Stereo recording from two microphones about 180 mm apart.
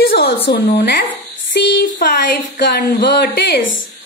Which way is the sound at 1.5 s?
75° left (ahead or behind).